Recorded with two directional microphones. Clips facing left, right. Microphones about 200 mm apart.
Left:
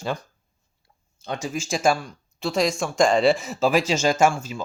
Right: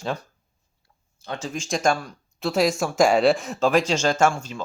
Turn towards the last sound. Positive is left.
turn(degrees=5)  # may be behind; listen again after turning